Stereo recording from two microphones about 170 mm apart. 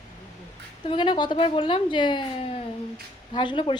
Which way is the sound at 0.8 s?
30° left (ahead or behind).